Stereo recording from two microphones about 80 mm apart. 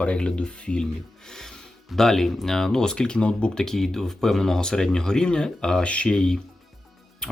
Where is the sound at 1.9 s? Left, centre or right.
Centre.